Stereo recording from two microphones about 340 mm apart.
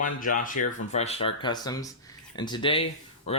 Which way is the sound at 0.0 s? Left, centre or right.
Left.